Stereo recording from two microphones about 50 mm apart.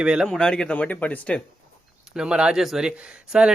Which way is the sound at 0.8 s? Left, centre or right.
Left.